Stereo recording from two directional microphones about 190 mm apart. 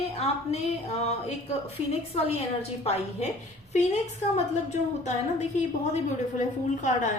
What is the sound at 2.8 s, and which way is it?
A woman's voice, 35° left (ahead or behind).